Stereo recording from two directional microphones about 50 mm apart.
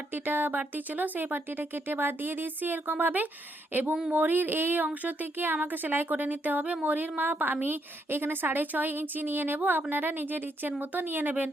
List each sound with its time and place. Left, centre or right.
0.1 s a woman's voice: right